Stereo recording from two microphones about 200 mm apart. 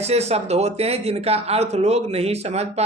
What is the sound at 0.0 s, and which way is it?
Speech, 30° right (ahead or behind).